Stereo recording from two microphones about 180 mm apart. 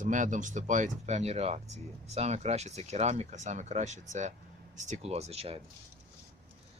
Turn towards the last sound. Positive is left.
turn(degrees=-35)  # may be behind; listen again after turning